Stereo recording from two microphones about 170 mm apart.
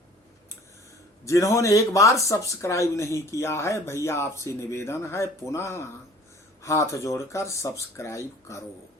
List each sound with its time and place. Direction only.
1.2 s speech: 20° left (ahead or behind)